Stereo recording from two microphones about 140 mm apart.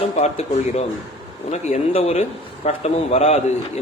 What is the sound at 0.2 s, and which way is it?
A man's voice, 50° left (ahead or behind).